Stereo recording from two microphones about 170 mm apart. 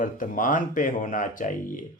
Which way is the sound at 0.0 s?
50° left (ahead or behind).